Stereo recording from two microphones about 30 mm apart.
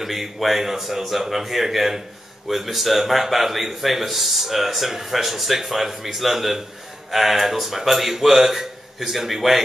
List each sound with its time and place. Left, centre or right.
0.0 s a man's voice: centre